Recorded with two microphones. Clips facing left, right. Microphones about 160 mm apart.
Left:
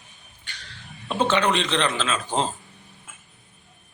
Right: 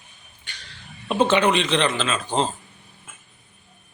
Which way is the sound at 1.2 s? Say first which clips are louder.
Right 2 dB; 5° right (ahead or behind).